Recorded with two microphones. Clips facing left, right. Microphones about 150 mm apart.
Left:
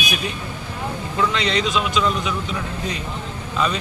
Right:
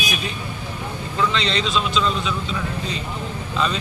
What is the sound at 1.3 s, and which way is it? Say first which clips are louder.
Speech: left 1 dB; 15° left (ahead or behind).